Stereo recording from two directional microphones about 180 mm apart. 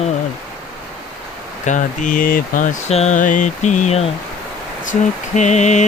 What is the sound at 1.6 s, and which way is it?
Speech, 45° left (ahead or behind).